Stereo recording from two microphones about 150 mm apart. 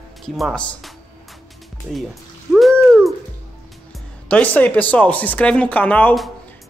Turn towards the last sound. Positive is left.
turn(degrees=10)  # may be behind; listen again after turning